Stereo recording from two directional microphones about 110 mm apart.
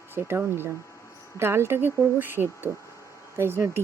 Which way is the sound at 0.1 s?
20° right (ahead or behind).